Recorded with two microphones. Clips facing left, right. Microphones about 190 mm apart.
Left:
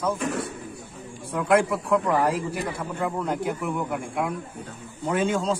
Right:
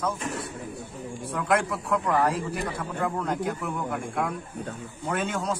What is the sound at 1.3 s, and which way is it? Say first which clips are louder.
A man's voice: left 5 dB; 15° left (ahead or behind).